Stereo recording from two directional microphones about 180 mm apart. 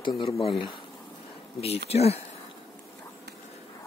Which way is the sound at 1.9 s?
35° left (ahead or behind).